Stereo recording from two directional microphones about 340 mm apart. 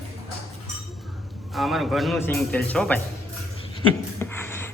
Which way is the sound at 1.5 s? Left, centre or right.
Centre.